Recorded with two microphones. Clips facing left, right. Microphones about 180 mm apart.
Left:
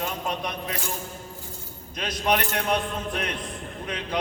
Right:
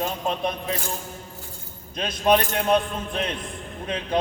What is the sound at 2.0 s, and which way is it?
Speech, 25° right (ahead or behind).